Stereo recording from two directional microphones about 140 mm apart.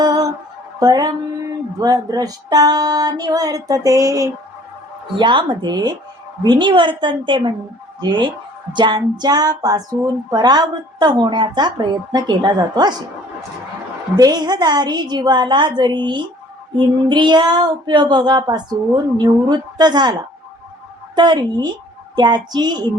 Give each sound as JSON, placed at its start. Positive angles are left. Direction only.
{"t": 0.0, "sound": "music", "side_deg": -25}
{"t": 5.1, "sound": "child singing", "side_deg": -35}
{"t": 8.7, "sound": "music", "side_deg": -30}
{"t": 10.3, "sound": "child singing", "side_deg": -30}
{"t": 14.2, "sound": "child singing", "side_deg": -30}
{"t": 21.2, "sound": "child singing", "side_deg": -30}